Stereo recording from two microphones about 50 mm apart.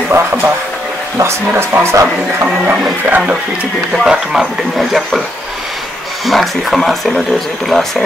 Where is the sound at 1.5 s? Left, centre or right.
Right.